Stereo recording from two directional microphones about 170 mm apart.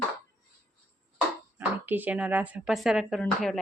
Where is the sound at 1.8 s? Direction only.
10° right (ahead or behind).